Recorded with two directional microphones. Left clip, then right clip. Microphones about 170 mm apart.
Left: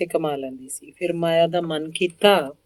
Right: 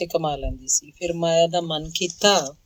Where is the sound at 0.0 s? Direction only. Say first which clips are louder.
Left 1 dB; 45° right (ahead or behind).